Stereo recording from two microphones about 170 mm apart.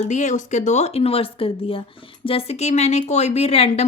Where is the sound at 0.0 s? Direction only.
45° left (ahead or behind).